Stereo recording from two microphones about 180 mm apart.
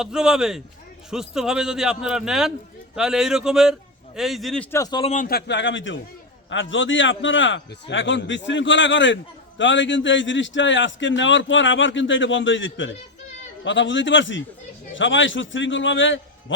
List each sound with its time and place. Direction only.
0.0 s a man's voice: 5° right (ahead or behind)
4.8 s a man's voice: 25° left (ahead or behind)
5.0 s a man's voice: 50° left (ahead or behind)
5.5 s a man's voice: 85° left